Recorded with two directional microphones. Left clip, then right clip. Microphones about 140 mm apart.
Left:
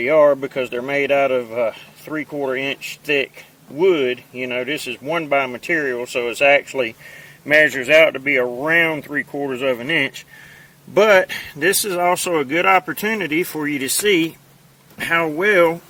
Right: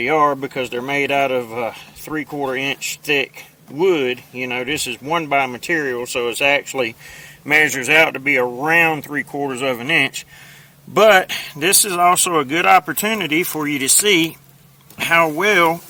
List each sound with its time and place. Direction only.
0.0 s speech: 40° right (ahead or behind)